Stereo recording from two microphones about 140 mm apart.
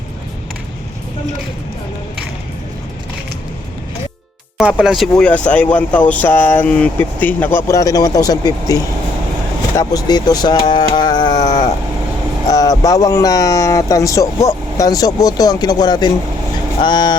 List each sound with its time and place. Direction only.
4.5 s speech: 5° right (ahead or behind); by 17.2 s 30° left (ahead or behind)